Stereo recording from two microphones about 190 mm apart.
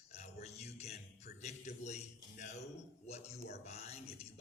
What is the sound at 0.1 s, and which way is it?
Music, 35° left (ahead or behind).